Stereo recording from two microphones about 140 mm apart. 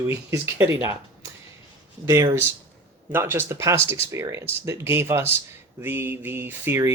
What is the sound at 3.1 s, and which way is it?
Speech, 15° right (ahead or behind).